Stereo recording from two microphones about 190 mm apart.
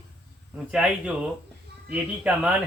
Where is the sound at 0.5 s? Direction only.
5° right (ahead or behind).